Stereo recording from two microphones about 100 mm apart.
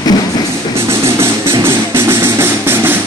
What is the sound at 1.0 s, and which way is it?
Music, 25° right (ahead or behind).